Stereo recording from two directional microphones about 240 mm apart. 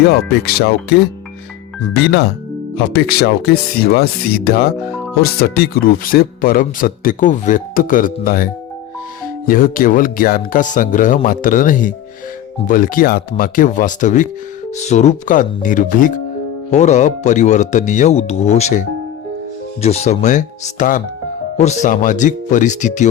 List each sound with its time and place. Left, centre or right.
0.0 s speech: left
9.5 s speech: left